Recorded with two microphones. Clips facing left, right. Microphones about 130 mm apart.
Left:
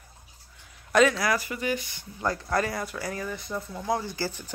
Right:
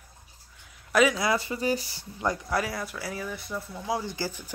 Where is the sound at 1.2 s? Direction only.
25° right (ahead or behind).